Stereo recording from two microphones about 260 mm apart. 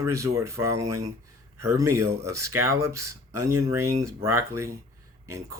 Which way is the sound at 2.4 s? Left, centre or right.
Right.